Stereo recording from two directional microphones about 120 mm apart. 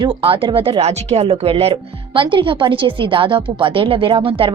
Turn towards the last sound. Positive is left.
turn(degrees=-45)  # may be behind; listen again after turning